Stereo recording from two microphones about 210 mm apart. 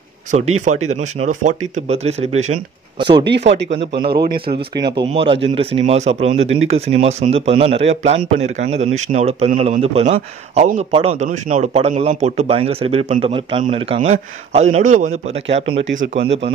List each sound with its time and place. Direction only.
0.7 s speech: 35° right (ahead or behind)
3.3 s speech: 55° right (ahead or behind)
4.7 s speech: 20° right (ahead or behind)